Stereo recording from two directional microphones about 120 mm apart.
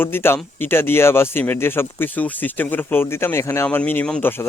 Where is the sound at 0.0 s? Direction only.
20° left (ahead or behind).